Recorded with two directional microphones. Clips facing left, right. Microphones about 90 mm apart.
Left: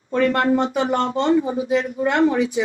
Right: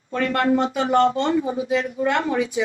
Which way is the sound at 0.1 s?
30° left (ahead or behind).